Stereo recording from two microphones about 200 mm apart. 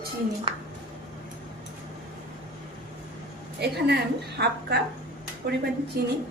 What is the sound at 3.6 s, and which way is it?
A woman's voice, 55° right (ahead or behind).